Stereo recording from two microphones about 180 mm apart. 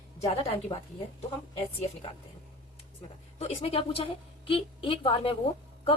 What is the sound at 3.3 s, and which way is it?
A woman's voice, 35° left (ahead or behind).